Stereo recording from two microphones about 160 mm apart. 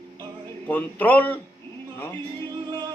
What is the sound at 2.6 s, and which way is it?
Music, 25° right (ahead or behind).